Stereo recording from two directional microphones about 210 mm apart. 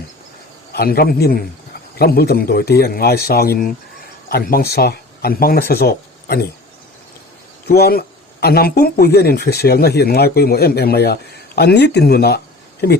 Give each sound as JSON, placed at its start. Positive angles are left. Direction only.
{"t": 0.8, "sound": "speech", "side_deg": 45}
{"t": 7.7, "sound": "speech", "side_deg": 45}